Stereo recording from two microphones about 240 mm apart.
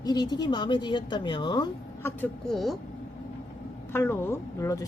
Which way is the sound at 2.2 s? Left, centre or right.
Centre.